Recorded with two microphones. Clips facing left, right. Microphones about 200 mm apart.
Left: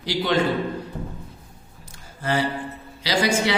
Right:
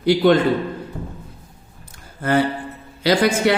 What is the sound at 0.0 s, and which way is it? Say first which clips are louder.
Speech: right 10 dB; 55° right (ahead or behind).